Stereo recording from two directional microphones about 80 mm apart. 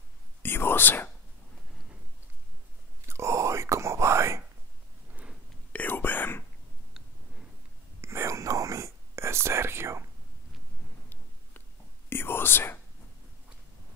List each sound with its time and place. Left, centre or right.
0.4 s whispering: left
3.1 s whispering: right
5.7 s whispering: left
8.0 s whispering: right
12.1 s whispering: left